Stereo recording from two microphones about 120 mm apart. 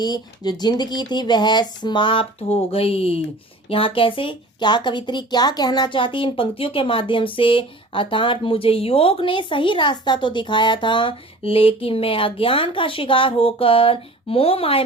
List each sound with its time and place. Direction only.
0.0 s speech: 35° left (ahead or behind); by 14.8 s 50° left (ahead or behind)